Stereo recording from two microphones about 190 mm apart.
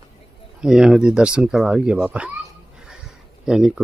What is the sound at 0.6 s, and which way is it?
Speech, 5° right (ahead or behind).